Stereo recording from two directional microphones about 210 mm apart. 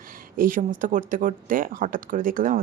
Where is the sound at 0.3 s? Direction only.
40° right (ahead or behind).